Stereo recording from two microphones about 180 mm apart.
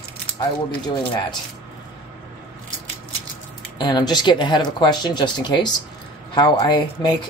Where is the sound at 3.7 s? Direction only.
25° left (ahead or behind).